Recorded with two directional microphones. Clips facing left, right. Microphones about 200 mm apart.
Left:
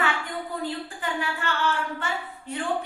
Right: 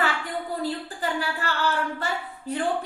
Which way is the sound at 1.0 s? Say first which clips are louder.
Right 2 dB; 35° right (ahead or behind).